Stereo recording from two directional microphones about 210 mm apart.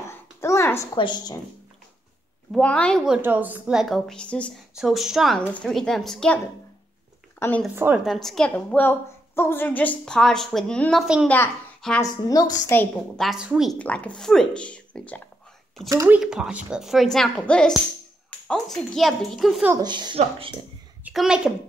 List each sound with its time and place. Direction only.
0.4 s a woman's voice: 15° left (ahead or behind)
2.5 s a woman's voice: 5° left (ahead or behind)
7.6 s a woman's voice: 10° right (ahead or behind)
11.2 s a child's voice: 10° left (ahead or behind)
15.9 s speech: 15° right (ahead or behind)
16.2 s a woman's voice: 5° right (ahead or behind)
19.7 s a woman's voice: 20° right (ahead or behind)
21.0 s a child's voice: centre (ahead or behind)